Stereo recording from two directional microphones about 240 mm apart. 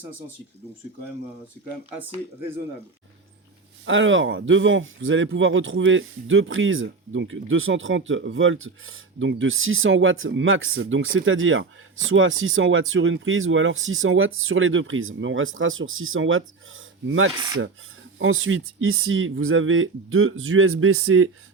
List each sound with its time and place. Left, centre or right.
3.8 s speech: right